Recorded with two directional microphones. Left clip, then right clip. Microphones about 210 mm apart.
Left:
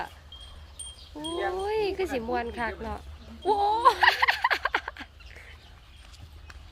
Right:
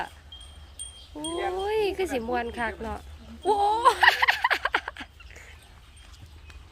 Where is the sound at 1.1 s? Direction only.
20° right (ahead or behind).